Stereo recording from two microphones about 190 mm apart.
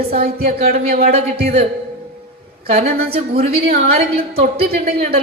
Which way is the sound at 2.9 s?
55° right (ahead or behind).